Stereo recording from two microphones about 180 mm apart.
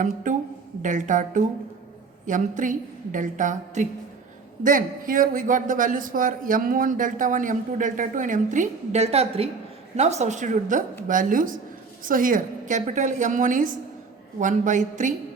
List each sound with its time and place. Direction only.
0.0 s a man's voice: 45° right (ahead or behind)